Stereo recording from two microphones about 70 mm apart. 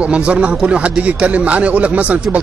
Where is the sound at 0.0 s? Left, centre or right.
Centre.